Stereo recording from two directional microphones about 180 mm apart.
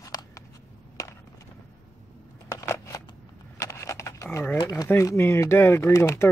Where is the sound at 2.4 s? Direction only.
15° left (ahead or behind).